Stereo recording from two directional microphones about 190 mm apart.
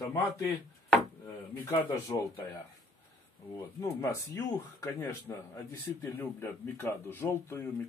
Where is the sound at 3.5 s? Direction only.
15° left (ahead or behind).